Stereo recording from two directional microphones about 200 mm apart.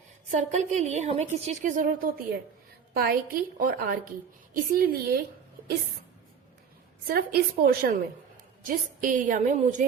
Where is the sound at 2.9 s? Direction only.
50° right (ahead or behind).